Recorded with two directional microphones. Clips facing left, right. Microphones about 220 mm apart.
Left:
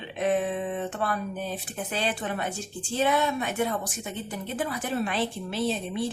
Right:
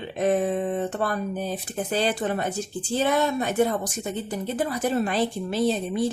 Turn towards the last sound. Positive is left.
turn(degrees=-40)  # may be behind; listen again after turning